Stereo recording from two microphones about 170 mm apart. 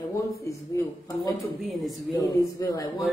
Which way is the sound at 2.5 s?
20° left (ahead or behind).